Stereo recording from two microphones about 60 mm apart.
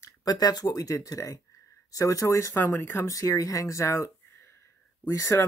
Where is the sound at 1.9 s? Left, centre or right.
Left.